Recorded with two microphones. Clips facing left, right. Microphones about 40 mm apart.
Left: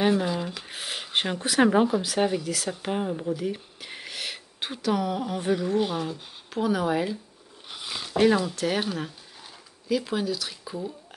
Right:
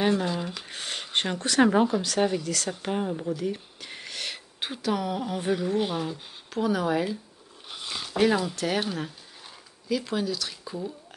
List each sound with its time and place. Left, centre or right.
0.0 s speech: centre